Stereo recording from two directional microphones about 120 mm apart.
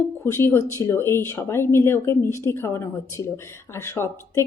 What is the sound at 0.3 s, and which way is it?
A woman's voice, 20° left (ahead or behind).